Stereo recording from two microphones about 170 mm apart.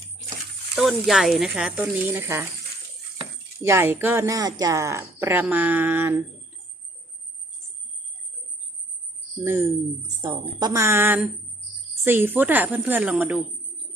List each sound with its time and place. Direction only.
0.8 s speech: centre (ahead or behind)
9.4 s speech: 15° right (ahead or behind)